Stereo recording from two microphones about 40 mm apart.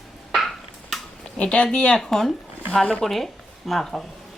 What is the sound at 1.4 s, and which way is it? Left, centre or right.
Speech, left.